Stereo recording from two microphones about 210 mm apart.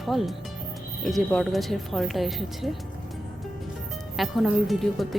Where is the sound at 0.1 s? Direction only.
Centre (ahead or behind).